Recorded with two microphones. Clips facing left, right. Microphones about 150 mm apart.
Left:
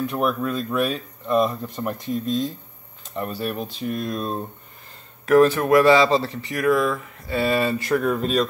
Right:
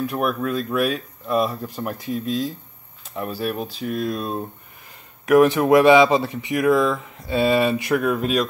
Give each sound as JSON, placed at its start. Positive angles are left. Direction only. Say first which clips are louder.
{"t": 0.0, "sound": "speech", "louder": "even", "side_deg": -5}